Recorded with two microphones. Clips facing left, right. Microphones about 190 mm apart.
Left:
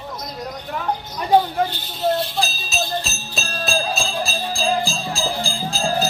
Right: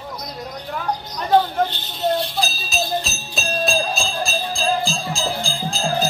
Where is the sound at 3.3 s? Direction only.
5° left (ahead or behind).